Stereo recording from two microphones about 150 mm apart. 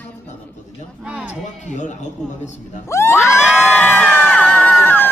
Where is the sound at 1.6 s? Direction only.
55° left (ahead or behind).